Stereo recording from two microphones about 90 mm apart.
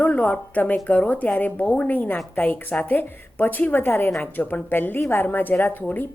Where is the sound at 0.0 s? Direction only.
15° left (ahead or behind).